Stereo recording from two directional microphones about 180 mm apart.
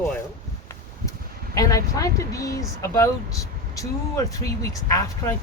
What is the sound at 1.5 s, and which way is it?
Speech, 20° left (ahead or behind).